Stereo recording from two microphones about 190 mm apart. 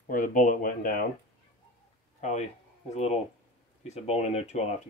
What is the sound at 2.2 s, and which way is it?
Speech, 40° left (ahead or behind).